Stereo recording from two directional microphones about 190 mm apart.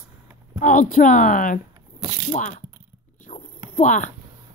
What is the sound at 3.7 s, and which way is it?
Speech, 40° left (ahead or behind).